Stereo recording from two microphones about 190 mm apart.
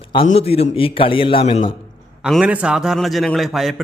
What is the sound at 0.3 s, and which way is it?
A man's voice, 30° left (ahead or behind).